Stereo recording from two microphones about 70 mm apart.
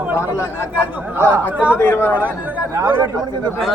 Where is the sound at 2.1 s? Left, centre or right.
Right.